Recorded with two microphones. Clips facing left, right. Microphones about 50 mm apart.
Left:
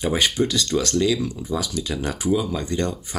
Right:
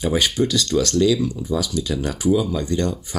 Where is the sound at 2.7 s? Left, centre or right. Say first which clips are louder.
Right 2 dB; left.